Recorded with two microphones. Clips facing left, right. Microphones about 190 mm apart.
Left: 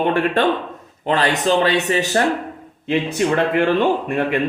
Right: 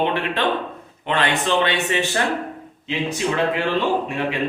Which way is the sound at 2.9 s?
55° left (ahead or behind).